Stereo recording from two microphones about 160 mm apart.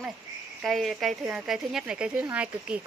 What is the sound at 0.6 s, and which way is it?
Speech, centre (ahead or behind).